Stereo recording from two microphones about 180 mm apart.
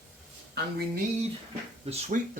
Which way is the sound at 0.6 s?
65° right (ahead or behind).